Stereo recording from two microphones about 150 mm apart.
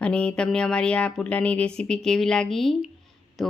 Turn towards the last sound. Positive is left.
turn(degrees=0)  # may be behind; listen again after turning